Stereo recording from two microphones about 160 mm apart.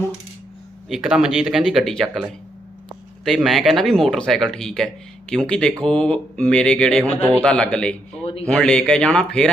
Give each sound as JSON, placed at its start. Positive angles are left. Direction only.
{"t": 0.9, "sound": "speech", "side_deg": 0}
{"t": 8.2, "sound": "speech", "side_deg": 35}
{"t": 8.4, "sound": "speech", "side_deg": 5}